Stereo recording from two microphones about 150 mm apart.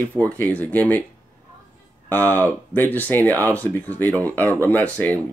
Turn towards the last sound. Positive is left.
turn(degrees=10)  # may be behind; listen again after turning